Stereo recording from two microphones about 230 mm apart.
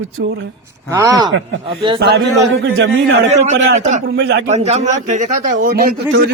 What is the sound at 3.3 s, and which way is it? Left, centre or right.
Speech, right.